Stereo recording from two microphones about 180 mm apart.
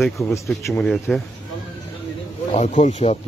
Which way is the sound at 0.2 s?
15° left (ahead or behind).